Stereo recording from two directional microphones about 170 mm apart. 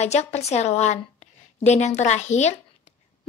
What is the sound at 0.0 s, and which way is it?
A woman's voice, 40° left (ahead or behind).